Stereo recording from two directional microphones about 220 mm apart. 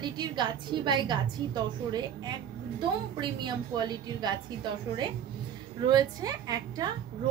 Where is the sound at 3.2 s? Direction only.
20° right (ahead or behind).